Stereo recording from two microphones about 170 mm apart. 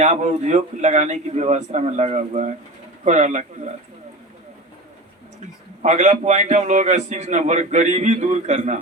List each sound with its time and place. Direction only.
0.0 s a man's voice: 45° right (ahead or behind)
5.8 s a man's voice: 40° right (ahead or behind)